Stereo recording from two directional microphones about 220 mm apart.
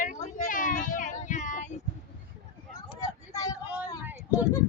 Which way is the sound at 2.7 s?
15° left (ahead or behind).